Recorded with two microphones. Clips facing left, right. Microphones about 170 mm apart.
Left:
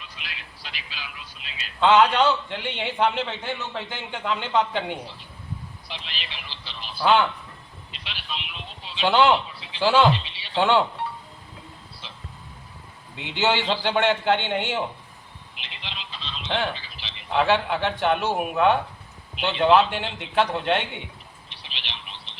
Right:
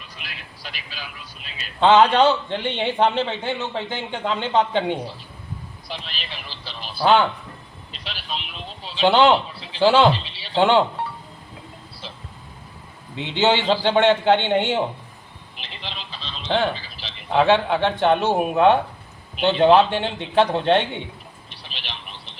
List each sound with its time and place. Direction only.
0.0 s a man's voice: 45° right (ahead or behind)
1.8 s a man's voice: 25° right (ahead or behind)
5.9 s a man's voice: 40° right (ahead or behind)
10.6 s a man's voice: 20° right (ahead or behind)
13.1 s a man's voice: 25° right (ahead or behind)
15.5 s telephone: 35° right (ahead or behind)
16.7 s a sound: 35° right (ahead or behind)
17.4 s a man's voice: 25° right (ahead or behind)
21.5 s telephone: 40° right (ahead or behind)